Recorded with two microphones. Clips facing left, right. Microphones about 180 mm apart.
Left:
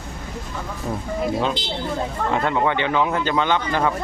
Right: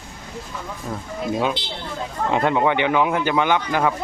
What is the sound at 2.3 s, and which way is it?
A man's voice, 15° right (ahead or behind).